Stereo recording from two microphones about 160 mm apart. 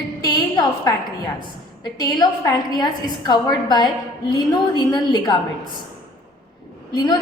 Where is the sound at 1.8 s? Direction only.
25° left (ahead or behind).